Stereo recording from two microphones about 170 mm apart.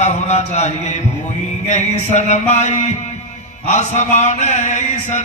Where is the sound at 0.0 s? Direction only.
45° left (ahead or behind).